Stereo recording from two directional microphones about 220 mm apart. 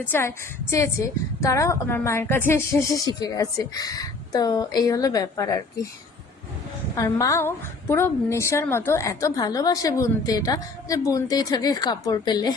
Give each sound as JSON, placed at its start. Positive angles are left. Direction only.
{"t": 0.1, "sound": "a woman's voice", "side_deg": 10}
{"t": 6.9, "sound": "a woman's voice", "side_deg": 15}